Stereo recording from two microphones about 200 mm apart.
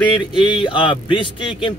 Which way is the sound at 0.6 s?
25° left (ahead or behind).